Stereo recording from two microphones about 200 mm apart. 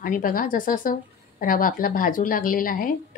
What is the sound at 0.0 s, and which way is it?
A woman's voice, 45° left (ahead or behind).